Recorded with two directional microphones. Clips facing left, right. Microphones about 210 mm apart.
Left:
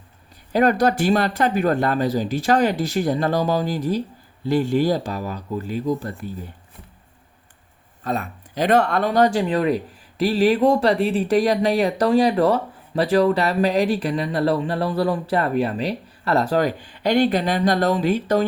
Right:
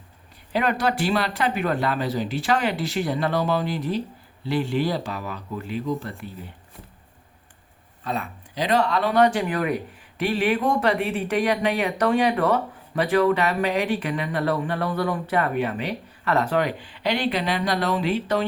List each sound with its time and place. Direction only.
0.5 s speech: 40° left (ahead or behind)
8.0 s speech: 45° left (ahead or behind)